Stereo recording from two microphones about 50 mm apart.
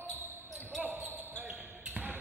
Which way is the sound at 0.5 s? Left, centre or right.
Centre.